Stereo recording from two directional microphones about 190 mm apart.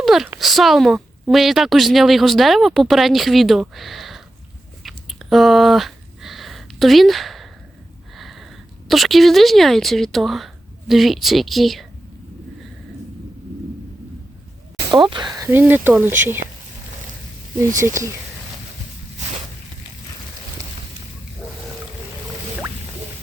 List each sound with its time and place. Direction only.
0.0 s a sound: centre (ahead or behind)
0.3 s speech: centre (ahead or behind)
4.8 s chewing: centre (ahead or behind)
8.1 s a sound: centre (ahead or behind)
8.9 s speech: centre (ahead or behind)
14.8 s speech: 25° right (ahead or behind)
17.7 s speech: 15° right (ahead or behind)